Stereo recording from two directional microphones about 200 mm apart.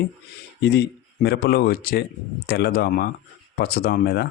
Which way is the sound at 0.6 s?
55° left (ahead or behind).